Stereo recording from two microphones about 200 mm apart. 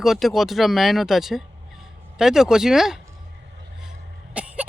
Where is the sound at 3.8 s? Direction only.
5° right (ahead or behind).